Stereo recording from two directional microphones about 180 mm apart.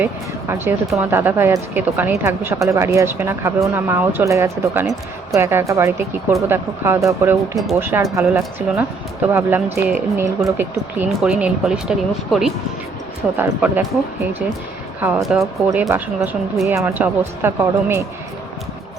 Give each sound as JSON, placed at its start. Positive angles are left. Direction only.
{"t": 0.0, "sound": "speech", "side_deg": -10}
{"t": 15.2, "sound": "speech", "side_deg": 0}